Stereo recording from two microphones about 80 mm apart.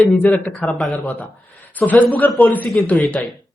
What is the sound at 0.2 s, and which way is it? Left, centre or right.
Speech, left.